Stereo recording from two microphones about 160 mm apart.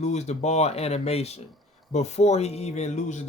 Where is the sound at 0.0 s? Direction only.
45° left (ahead or behind).